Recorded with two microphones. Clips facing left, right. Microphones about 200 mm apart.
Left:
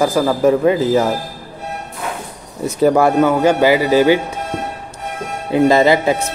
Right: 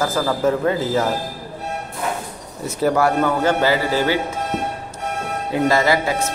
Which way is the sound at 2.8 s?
20° left (ahead or behind).